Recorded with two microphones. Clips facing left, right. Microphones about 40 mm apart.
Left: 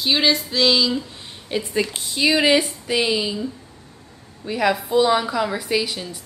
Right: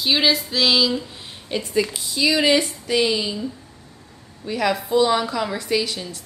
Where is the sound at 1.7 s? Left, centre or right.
Left.